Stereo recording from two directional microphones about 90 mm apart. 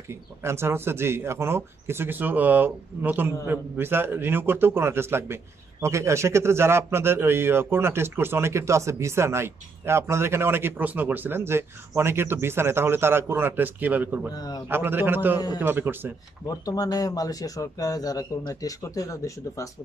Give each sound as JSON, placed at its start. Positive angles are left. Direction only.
{"t": 0.1, "sound": "a man's voice", "side_deg": -30}
{"t": 14.3, "sound": "speech", "side_deg": 45}
{"t": 14.7, "sound": "a man's voice", "side_deg": -25}
{"t": 16.4, "sound": "speech", "side_deg": 45}